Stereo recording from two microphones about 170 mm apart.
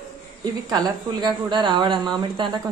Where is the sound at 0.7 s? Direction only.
25° right (ahead or behind).